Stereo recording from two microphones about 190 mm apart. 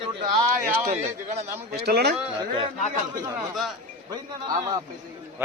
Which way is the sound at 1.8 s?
60° right (ahead or behind).